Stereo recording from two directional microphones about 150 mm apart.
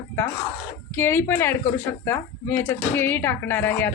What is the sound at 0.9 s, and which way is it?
Speech, 15° left (ahead or behind).